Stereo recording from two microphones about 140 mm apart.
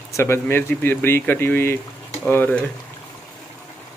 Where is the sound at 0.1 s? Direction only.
15° left (ahead or behind).